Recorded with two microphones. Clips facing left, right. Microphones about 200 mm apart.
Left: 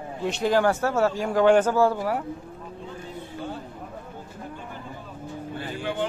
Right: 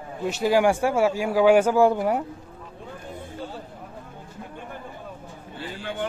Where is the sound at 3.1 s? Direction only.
50° right (ahead or behind).